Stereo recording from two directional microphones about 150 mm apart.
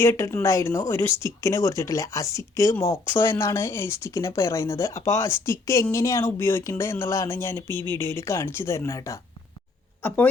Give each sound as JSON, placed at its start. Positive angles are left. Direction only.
{"t": 0.0, "sound": "speech", "side_deg": 20}
{"t": 7.7, "sound": "speech", "side_deg": -30}
{"t": 7.9, "sound": "speech", "side_deg": 15}